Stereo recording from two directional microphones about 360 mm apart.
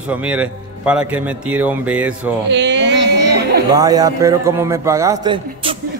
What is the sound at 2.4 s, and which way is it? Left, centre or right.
Speech, right.